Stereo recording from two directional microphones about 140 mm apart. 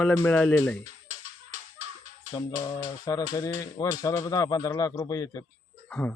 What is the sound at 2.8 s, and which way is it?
Speech, 25° left (ahead or behind).